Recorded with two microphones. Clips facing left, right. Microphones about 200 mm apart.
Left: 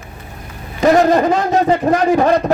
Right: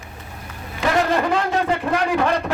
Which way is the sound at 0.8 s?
45° left (ahead or behind).